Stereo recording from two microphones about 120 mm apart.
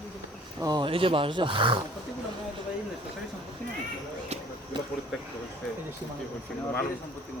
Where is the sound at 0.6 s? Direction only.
35° right (ahead or behind).